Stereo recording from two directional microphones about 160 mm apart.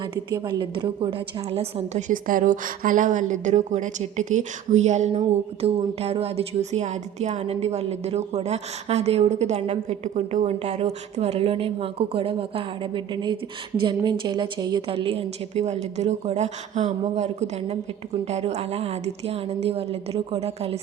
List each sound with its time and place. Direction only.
0.4 s a woman's voice: 25° right (ahead or behind)